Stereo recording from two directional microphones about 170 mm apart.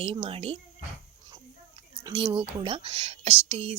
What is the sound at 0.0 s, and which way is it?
Speech, 35° right (ahead or behind).